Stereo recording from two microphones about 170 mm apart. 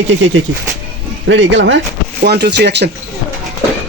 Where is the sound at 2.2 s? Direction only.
80° right.